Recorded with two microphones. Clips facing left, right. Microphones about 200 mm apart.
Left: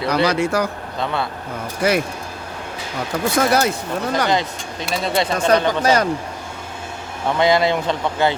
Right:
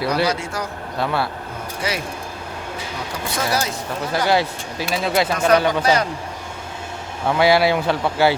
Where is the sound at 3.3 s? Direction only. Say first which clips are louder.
Left 5 dB; 60° left (ahead or behind).